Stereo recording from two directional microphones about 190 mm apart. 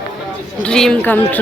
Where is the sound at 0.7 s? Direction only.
5° left (ahead or behind).